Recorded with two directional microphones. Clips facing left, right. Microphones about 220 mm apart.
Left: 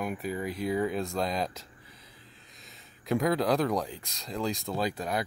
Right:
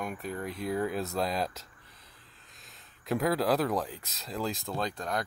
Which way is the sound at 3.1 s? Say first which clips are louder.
Left 1 dB; centre (ahead or behind).